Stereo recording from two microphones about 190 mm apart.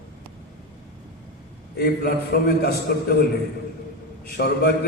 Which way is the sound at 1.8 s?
55° left (ahead or behind).